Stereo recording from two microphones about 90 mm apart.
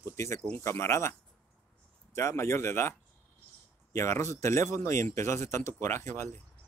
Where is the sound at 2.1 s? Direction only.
30° left (ahead or behind).